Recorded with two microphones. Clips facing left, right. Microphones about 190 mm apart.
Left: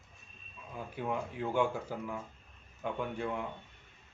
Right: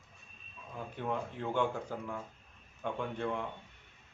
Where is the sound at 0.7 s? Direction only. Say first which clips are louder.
Left 1 dB; 10° left (ahead or behind).